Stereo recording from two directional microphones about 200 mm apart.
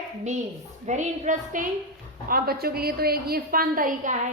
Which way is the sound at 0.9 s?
35° right (ahead or behind).